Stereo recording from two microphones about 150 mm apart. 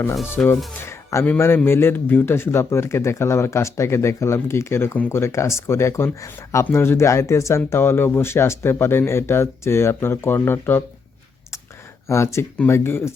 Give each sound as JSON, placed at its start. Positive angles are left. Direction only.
{"t": 0.4, "sound": "speech", "side_deg": 5}
{"t": 0.8, "sound": "speech", "side_deg": 15}
{"t": 12.0, "sound": "speech", "side_deg": 20}